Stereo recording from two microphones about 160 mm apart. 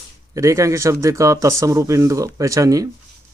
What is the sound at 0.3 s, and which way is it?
Speech, 20° right (ahead or behind).